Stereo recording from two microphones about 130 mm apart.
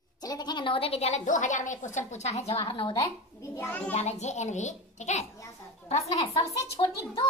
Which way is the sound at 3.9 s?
60° left (ahead or behind).